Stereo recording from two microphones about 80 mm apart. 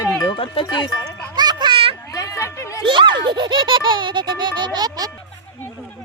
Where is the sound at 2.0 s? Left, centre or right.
Left.